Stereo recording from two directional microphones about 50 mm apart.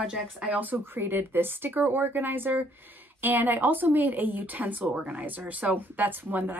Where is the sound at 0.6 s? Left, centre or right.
Right.